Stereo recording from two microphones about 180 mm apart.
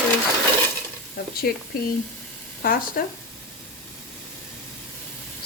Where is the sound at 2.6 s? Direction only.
55° left (ahead or behind).